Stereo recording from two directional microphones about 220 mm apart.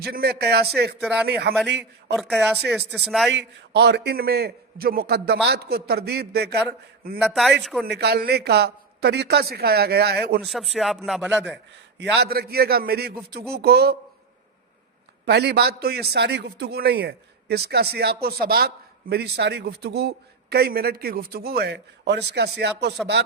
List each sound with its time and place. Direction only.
0.0 s a man's voice: 45° right (ahead or behind)
2.1 s a man's voice: centre (ahead or behind)
3.3 s a man's voice: 50° right (ahead or behind)
7.2 s a man's voice: centre (ahead or behind)
7.9 s a man's voice: 50° right (ahead or behind)
10.4 s a man's voice: centre (ahead or behind)
11.9 s a man's voice: 45° right (ahead or behind)
15.3 s a man's voice: 50° right (ahead or behind)